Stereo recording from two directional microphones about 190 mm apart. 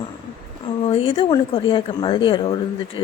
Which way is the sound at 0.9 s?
30° left (ahead or behind).